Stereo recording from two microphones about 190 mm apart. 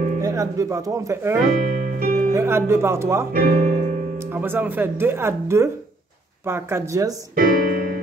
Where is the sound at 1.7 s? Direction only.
50° right (ahead or behind).